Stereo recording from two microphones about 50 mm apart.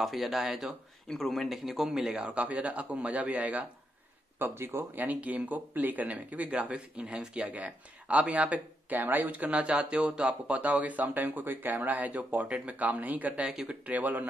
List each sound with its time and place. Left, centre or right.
0.0 s speech: centre
1.0 s speech: centre
2.3 s a man's voice: right
4.4 s speech: right
4.9 s speech: right
13.4 s speech: centre
13.8 s speech: right